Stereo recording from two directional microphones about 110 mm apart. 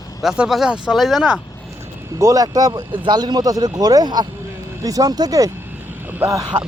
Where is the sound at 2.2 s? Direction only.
30° right (ahead or behind).